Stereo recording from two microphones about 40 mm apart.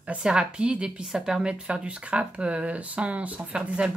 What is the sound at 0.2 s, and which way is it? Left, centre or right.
Speech, right.